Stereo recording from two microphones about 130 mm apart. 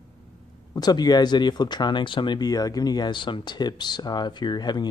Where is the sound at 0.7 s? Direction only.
30° left (ahead or behind).